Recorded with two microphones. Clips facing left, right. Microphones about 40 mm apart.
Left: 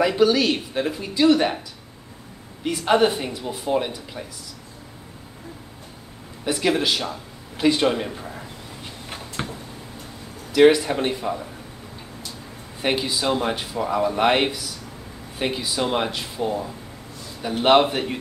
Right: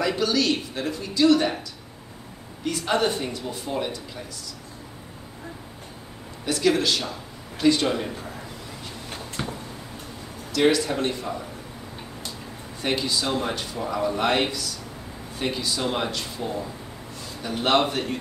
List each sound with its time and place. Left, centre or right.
0.0 s speech: centre
2.6 s speech: centre
6.4 s speech: centre
9.4 s a sound: left
10.5 s speech: centre
12.8 s speech: left